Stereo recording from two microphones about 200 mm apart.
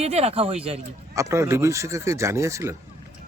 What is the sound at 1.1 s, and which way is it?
Speech, 15° right (ahead or behind).